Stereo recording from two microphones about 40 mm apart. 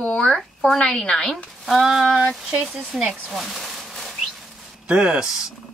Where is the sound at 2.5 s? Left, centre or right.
Centre.